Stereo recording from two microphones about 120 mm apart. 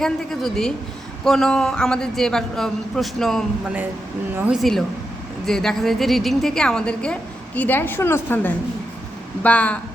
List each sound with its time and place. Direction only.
0.0 s a man's voice: 5° left (ahead or behind)
4.5 s a man's voice: centre (ahead or behind)